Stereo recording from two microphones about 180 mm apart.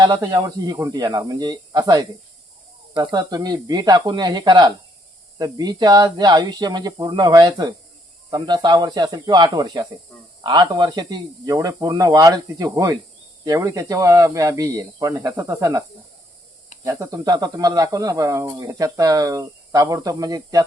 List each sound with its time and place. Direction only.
0.0 s speech: 25° right (ahead or behind)
16.8 s speech: 20° right (ahead or behind)